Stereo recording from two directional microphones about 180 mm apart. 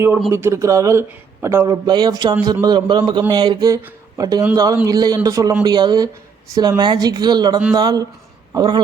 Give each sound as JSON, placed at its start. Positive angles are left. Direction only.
{"t": 0.3, "sound": "a man's voice", "side_deg": -15}